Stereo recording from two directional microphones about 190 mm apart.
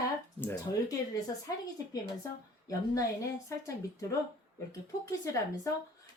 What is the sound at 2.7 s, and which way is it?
Speech, 15° left (ahead or behind).